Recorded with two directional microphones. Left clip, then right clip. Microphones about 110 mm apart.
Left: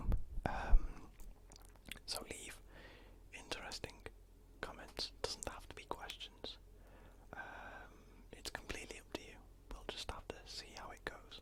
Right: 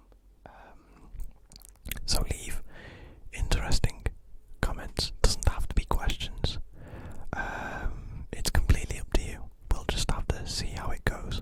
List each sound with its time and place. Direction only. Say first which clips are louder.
0.4 s whispering: left 8 dB; 15° left (ahead or behind)
1.5 s chewing: right 11 dB; 40° right (ahead or behind)
2.2 s whispering: right 10 dB; 30° right (ahead or behind); by 11.3 s 45° right (ahead or behind)